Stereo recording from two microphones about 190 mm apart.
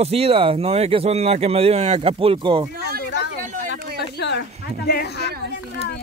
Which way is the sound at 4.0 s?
65° left (ahead or behind).